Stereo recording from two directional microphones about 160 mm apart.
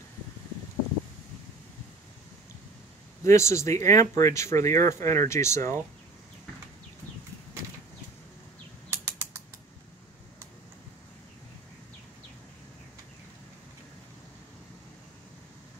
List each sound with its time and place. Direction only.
3.3 s speech: 20° left (ahead or behind)
8.9 s typing: 15° right (ahead or behind)